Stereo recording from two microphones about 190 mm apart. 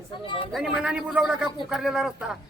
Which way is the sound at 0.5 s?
Centre (ahead or behind).